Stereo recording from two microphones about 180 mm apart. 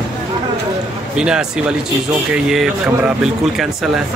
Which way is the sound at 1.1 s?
5° right (ahead or behind).